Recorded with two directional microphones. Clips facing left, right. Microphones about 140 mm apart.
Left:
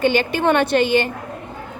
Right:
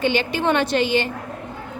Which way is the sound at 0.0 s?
50° left (ahead or behind).